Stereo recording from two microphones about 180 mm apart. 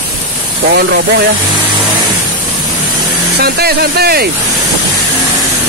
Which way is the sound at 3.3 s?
60° right (ahead or behind).